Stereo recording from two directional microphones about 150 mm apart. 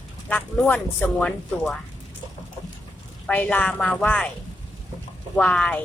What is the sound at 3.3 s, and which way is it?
Speech, 10° left (ahead or behind).